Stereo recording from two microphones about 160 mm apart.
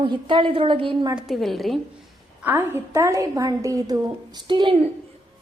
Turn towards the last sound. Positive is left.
turn(degrees=-30)  # may be behind; listen again after turning